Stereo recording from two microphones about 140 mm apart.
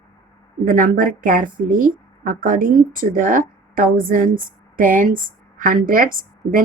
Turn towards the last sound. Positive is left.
turn(degrees=-80)